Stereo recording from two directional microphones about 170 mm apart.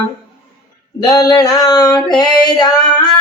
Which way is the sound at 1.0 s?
20° left (ahead or behind).